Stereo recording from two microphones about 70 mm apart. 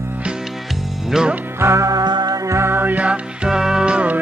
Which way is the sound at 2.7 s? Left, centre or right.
Right.